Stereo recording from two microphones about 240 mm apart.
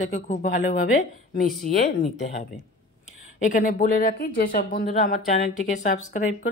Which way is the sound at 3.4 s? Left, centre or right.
Left.